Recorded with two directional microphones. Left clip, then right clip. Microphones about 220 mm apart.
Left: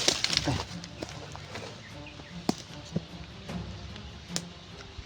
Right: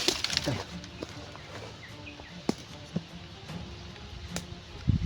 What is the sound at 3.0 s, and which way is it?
Music, 25° left (ahead or behind).